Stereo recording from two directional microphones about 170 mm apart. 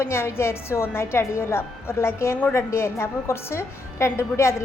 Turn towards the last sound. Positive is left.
turn(degrees=15)  # may be behind; listen again after turning